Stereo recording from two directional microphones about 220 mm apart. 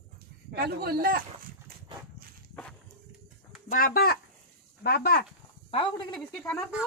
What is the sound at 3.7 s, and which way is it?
Speech, 40° left (ahead or behind).